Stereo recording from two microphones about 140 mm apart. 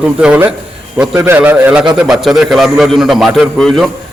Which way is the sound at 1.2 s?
15° right (ahead or behind).